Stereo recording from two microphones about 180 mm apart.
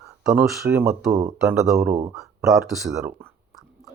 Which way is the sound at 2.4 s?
Centre (ahead or behind).